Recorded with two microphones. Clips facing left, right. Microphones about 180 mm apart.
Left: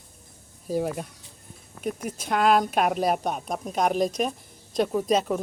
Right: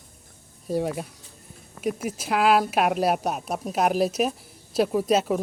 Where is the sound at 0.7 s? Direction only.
Centre (ahead or behind).